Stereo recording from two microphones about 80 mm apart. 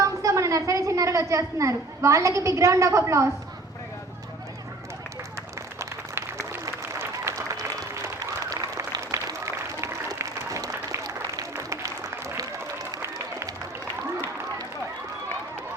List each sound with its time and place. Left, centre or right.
0.0 s a woman's voice: right
9.0 s applause: right